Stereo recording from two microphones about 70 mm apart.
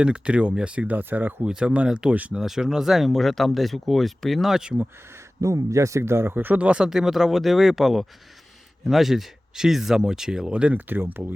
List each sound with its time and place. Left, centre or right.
0.0 s speech: centre
1.5 s speech: centre
2.4 s speech: centre
5.1 s speech: right